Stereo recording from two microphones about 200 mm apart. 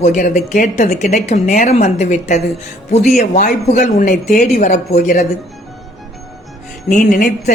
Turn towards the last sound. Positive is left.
turn(degrees=40)  # may be behind; listen again after turning